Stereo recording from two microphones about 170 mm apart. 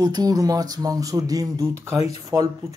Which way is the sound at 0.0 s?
20° right (ahead or behind).